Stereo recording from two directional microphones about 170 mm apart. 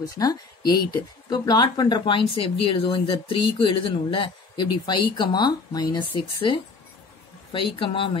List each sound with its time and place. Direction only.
0.0 s speech: 20° left (ahead or behind)